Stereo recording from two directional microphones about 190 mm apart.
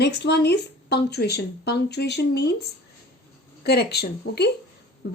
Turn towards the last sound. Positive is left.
turn(degrees=60)  # may be behind; listen again after turning